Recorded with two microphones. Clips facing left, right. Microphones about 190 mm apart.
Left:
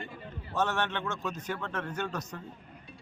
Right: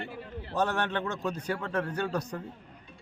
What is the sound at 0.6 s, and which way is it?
A man's voice, 35° right (ahead or behind).